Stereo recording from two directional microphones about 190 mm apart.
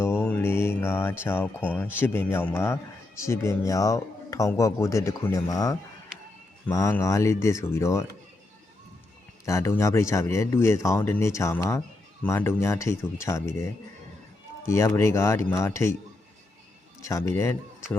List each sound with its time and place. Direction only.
0.0 s mantra: 10° left (ahead or behind)
1.2 s speech: 10° left (ahead or behind)
9.5 s speech: 15° left (ahead or behind)
17.0 s speech: 15° left (ahead or behind)